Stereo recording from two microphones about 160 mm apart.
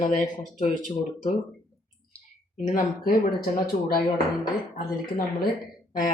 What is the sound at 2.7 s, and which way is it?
Speech, 60° left (ahead or behind).